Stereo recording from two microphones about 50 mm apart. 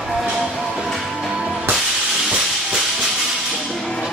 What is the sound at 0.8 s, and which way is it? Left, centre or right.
Music, centre.